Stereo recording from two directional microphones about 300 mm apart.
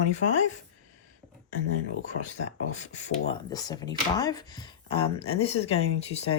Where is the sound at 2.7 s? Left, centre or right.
Left.